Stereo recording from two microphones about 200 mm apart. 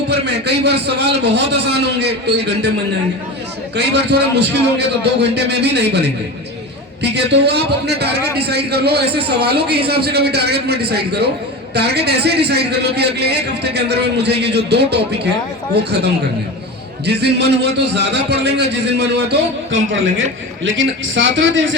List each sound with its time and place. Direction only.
0.1 s a man's voice: 55° right (ahead or behind)
3.8 s a man's voice: 55° right (ahead or behind)
17.1 s a man's voice: 55° right (ahead or behind)
19.7 s speech: 70° right (ahead or behind)